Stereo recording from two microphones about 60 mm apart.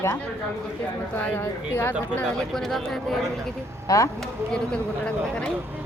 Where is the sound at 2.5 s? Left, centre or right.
Centre.